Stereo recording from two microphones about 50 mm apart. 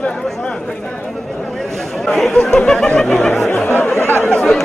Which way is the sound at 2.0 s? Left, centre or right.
Centre.